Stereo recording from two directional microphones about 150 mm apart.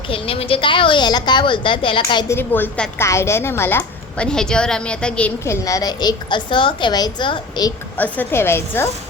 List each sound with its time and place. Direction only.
0.1 s a woman's voice: 40° left (ahead or behind)
2.3 s a woman's voice: 15° left (ahead or behind)
5.5 s a woman's voice: 20° left (ahead or behind)
7.9 s a woman's voice: 10° left (ahead or behind)